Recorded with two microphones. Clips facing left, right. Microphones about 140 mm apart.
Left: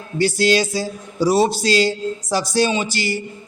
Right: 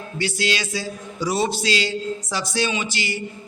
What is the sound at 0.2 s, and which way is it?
A man's voice, 40° left (ahead or behind).